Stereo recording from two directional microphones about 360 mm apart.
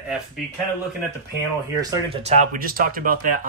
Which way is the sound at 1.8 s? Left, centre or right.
Centre.